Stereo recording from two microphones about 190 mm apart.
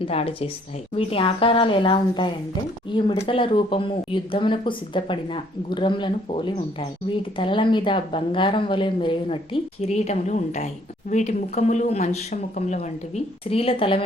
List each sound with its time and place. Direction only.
0.0 s speech: 30° left (ahead or behind)